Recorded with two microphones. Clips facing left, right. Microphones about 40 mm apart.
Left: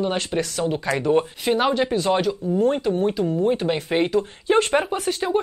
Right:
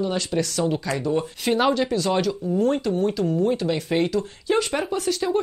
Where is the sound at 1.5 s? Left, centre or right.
Centre.